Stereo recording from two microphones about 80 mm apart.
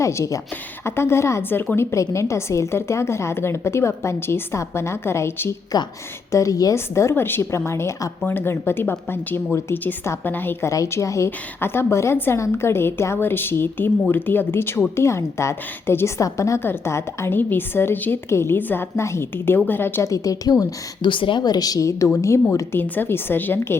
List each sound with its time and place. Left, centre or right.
0.0 s a woman's voice: left
6.3 s a woman's voice: left
6.7 s a woman's voice: left
10.7 s a woman's voice: left
20.1 s a woman's voice: left
21.0 s a woman's voice: left
22.7 s a woman's voice: left